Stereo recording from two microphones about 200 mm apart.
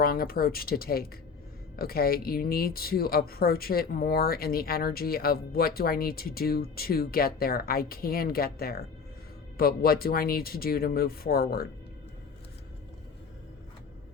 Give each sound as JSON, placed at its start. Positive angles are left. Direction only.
{"t": 0.0, "sound": "speech", "side_deg": 50}